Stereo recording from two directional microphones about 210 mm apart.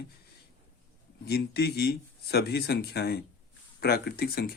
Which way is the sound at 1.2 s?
50° left (ahead or behind).